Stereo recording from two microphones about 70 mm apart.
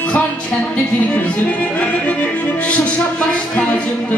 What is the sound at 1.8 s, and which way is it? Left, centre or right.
Music, centre.